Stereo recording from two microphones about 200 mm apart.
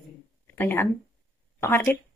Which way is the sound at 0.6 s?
10° left (ahead or behind).